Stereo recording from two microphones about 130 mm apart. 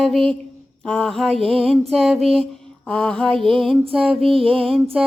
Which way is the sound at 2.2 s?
45° right (ahead or behind).